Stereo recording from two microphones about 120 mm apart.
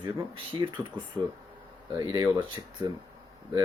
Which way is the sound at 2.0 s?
30° right (ahead or behind).